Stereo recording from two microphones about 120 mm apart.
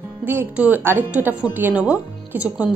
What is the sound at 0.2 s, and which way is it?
A woman's voice, 15° right (ahead or behind).